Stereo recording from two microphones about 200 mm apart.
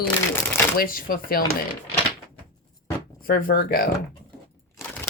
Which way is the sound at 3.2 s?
45° left (ahead or behind).